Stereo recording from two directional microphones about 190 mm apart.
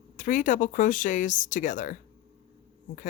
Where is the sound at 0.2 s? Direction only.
45° left (ahead or behind).